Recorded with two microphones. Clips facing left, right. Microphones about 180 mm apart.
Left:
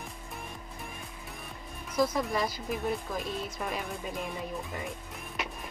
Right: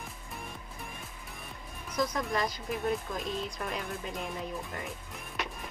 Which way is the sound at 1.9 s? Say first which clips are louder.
Left 3 dB; 5° left (ahead or behind).